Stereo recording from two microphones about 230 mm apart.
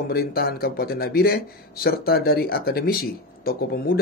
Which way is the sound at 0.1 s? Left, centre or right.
Left.